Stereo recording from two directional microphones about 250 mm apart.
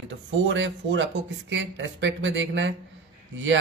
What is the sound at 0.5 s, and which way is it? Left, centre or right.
Speech, right.